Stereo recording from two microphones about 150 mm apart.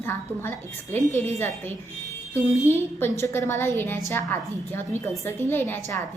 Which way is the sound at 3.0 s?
15° left (ahead or behind).